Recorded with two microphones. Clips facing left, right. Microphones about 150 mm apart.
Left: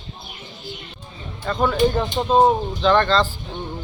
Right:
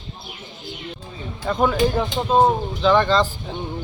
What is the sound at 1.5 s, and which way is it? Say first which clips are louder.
Speech: right 2 dB; 10° right (ahead or behind).